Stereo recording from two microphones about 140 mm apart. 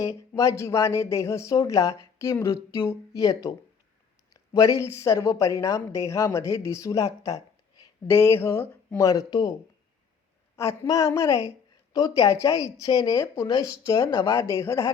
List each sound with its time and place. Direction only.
0.0 s speech: 25° left (ahead or behind)
10.6 s speech: 20° left (ahead or behind)